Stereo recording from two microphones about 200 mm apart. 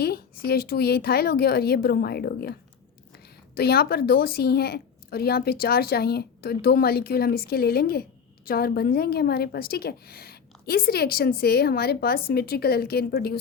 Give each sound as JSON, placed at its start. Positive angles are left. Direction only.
{"t": 0.0, "sound": "a woman's voice", "side_deg": 50}
{"t": 3.6, "sound": "a woman's voice", "side_deg": 50}